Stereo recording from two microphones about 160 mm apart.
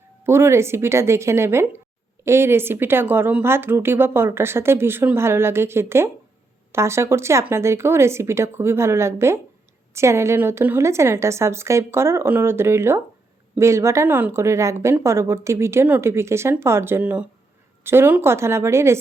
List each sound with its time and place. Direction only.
0.3 s speech: 15° right (ahead or behind)